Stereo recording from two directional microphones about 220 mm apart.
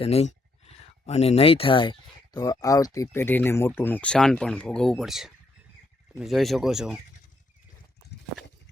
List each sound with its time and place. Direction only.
0.0 s speech: 30° left (ahead or behind); by 7.0 s centre (ahead or behind)